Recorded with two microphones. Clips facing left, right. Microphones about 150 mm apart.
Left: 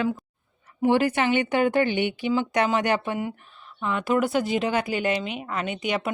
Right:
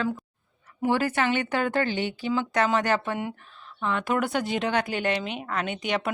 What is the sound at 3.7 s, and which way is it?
Speech, centre (ahead or behind).